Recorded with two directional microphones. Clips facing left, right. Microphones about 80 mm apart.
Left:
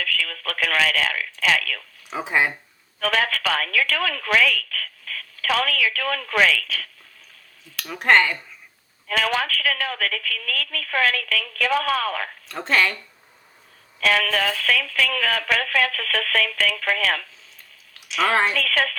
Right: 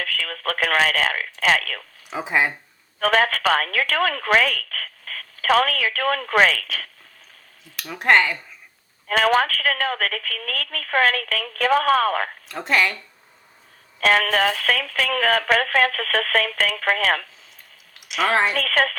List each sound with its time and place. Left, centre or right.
0.0 s speech: right
2.0 s speech: centre
3.0 s speech: right
7.8 s speech: centre
9.0 s speech: right
12.5 s speech: centre
14.0 s speech: right
18.5 s speech: right